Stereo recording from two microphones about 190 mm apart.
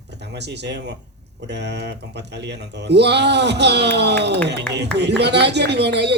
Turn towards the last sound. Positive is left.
turn(degrees=-65)  # may be behind; listen again after turning